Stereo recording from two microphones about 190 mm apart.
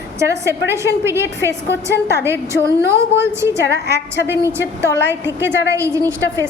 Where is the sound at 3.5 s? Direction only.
60° left (ahead or behind).